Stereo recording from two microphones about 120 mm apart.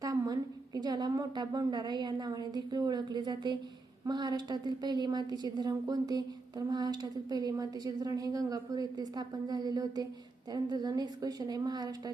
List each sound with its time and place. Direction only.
0.0 s a woman's voice: 30° right (ahead or behind)